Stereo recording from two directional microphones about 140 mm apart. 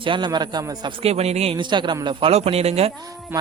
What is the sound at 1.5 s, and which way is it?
Speech, 35° right (ahead or behind).